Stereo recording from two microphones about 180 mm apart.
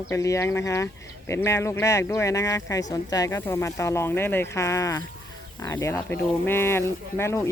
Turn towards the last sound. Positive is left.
turn(degrees=15)  # may be behind; listen again after turning